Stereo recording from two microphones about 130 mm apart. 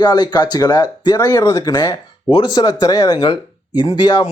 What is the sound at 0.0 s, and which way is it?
Speech, 30° left (ahead or behind).